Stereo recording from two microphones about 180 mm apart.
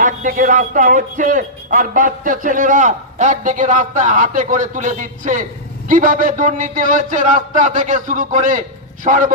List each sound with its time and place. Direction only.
0.0 s speech: 45° right (ahead or behind)